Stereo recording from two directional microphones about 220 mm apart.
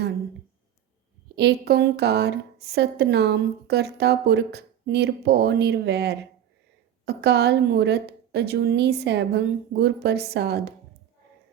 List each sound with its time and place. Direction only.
1.4 s a woman's voice: 50° right (ahead or behind)